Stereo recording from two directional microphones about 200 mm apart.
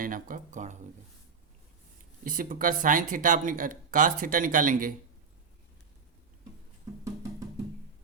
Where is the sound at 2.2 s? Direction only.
45° right (ahead or behind).